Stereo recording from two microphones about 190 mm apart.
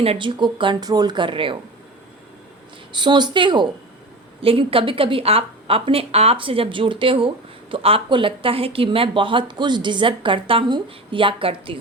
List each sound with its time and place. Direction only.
0.0 s speech: 30° right (ahead or behind)
2.9 s speech: 25° right (ahead or behind)